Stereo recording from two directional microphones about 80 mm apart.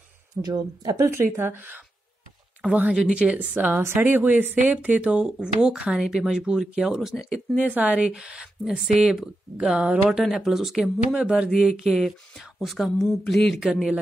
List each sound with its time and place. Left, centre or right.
0.4 s speech: right
0.9 s speech: right
2.7 s speech: centre
7.2 s speech: centre